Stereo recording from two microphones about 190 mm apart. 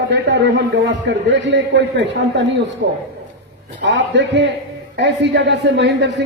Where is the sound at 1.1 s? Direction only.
70° right (ahead or behind).